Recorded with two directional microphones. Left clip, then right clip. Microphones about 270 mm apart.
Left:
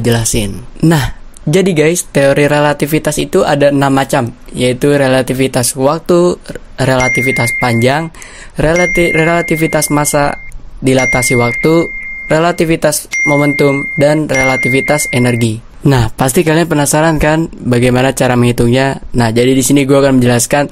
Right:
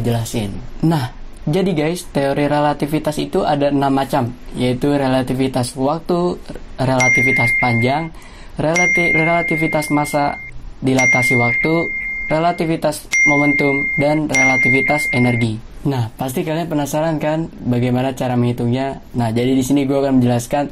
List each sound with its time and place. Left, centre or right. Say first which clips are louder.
0.0 s speech: left 8 dB; left